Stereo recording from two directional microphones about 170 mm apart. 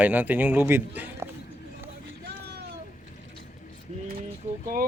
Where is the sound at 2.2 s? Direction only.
75° right (ahead or behind).